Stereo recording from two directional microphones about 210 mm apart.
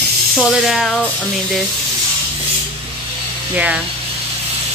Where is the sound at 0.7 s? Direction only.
Centre (ahead or behind).